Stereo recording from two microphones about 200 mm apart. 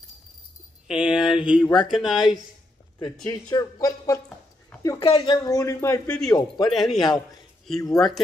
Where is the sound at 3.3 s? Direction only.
15° left (ahead or behind).